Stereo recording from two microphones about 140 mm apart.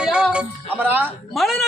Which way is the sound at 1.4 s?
Centre (ahead or behind).